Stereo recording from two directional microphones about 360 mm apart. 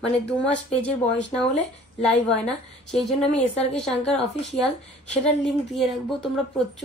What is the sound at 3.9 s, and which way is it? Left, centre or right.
Speech, centre.